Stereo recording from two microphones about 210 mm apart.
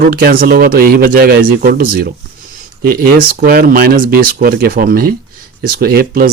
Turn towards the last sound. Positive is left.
turn(degrees=-45)  # may be behind; listen again after turning